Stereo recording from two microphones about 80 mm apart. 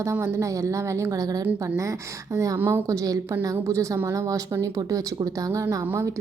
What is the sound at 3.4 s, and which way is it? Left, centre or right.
Speech, right.